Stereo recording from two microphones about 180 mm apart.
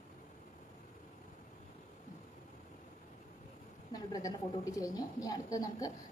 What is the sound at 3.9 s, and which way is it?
A woman's voice, 20° left (ahead or behind).